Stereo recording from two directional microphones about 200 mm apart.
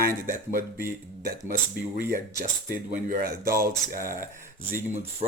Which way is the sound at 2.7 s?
40° right (ahead or behind).